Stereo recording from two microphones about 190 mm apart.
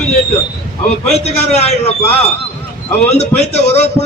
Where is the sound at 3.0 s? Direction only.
35° left (ahead or behind).